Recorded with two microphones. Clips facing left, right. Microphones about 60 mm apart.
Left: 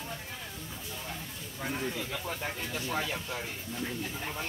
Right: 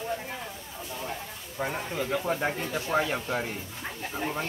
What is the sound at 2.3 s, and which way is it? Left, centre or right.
Speech, right.